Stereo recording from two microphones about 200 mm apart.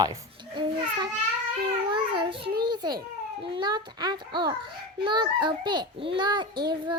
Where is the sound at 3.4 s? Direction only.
25° right (ahead or behind).